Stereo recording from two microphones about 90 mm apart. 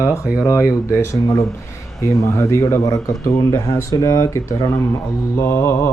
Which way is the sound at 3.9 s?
40° left (ahead or behind).